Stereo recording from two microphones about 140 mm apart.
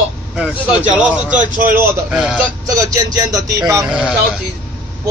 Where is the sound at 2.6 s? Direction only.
25° right (ahead or behind).